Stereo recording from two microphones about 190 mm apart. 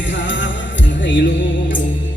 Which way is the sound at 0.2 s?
75° left (ahead or behind).